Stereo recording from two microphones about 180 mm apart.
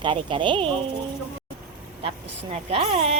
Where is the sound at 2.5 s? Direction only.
35° right (ahead or behind).